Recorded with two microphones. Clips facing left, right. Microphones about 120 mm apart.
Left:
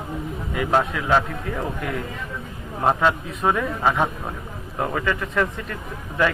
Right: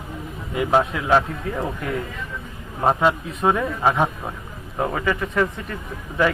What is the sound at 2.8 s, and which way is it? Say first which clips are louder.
Speech: right 1 dB; 10° right (ahead or behind).